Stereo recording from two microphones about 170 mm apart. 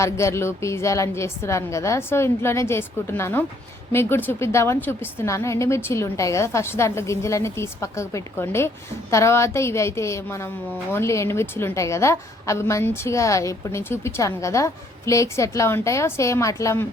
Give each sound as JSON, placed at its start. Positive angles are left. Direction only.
{"t": 0.0, "sound": "a woman's voice", "side_deg": 15}